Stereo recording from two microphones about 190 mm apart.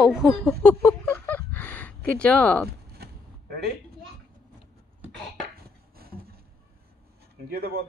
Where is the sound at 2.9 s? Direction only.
55° right (ahead or behind).